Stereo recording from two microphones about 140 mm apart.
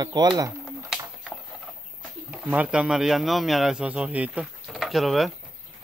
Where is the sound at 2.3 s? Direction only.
10° right (ahead or behind).